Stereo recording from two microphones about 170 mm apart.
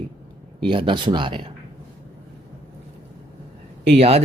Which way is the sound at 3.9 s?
35° right (ahead or behind).